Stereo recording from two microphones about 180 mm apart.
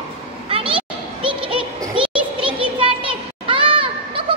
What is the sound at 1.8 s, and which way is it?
Children playing, 30° right (ahead or behind).